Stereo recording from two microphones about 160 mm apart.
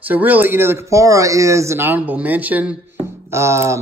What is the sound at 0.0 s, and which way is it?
Speech, 10° right (ahead or behind).